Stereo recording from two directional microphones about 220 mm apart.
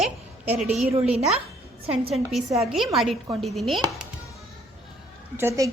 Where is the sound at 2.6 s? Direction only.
Centre (ahead or behind).